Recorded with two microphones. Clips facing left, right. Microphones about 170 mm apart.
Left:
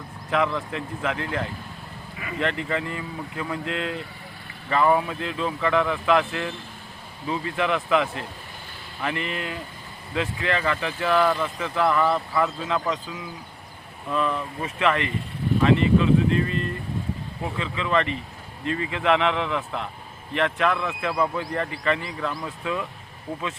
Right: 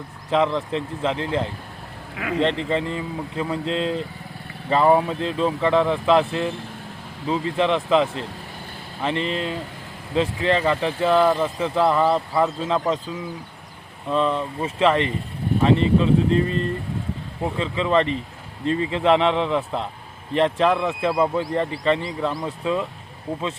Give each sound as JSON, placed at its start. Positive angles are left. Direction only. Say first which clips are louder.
{"t": 0.3, "sound": "speech", "louder": "right 4 dB", "side_deg": -30}
{"t": 2.1, "sound": "speech", "louder": "right 9 dB", "side_deg": -75}
{"t": 2.4, "sound": "speech", "louder": "right 4 dB", "side_deg": -25}
{"t": 14.1, "sound": "speech", "louder": "right 4 dB", "side_deg": -30}